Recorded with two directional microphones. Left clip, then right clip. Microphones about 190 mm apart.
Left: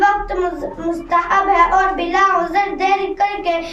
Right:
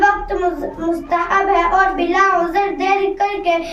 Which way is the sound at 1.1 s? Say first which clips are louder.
Left 1 dB; 20° left (ahead or behind).